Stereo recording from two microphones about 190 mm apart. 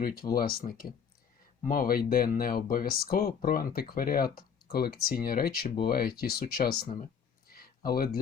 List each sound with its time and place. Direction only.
0.0 s speech: 50° left (ahead or behind)